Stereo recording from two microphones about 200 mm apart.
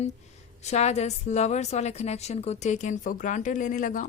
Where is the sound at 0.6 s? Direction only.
35° left (ahead or behind).